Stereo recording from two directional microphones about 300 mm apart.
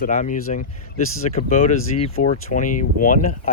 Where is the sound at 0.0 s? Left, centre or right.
Left.